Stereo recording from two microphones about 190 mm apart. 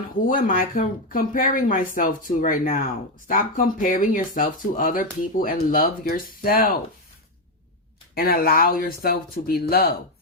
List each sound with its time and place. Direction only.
0.3 s speech: 45° left (ahead or behind)
8.1 s speech: 55° left (ahead or behind)